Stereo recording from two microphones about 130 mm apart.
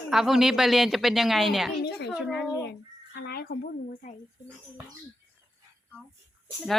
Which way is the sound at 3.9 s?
90° left.